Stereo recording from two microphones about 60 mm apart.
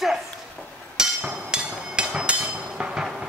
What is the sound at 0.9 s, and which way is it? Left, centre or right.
Hammer, centre.